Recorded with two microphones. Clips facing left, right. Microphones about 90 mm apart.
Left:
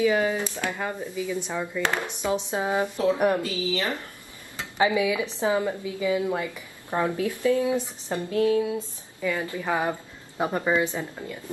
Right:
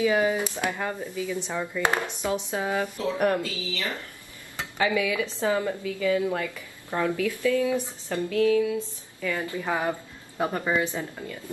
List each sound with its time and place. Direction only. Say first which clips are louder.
0.0 s speech: even; 15° right (ahead or behind)
0.7 s a woman's voice: even; 10° left (ahead or behind)
8.3 s a sound: even; 30° left (ahead or behind)
8.7 s a woman's voice: right 1 dB; 15° left (ahead or behind)